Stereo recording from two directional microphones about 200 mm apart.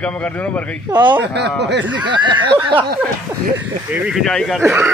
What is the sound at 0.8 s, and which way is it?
Speech, 15° right (ahead or behind).